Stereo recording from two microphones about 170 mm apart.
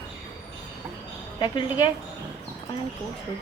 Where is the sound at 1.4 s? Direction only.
25° left (ahead or behind).